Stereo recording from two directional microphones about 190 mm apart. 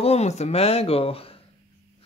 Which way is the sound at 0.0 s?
35° left (ahead or behind).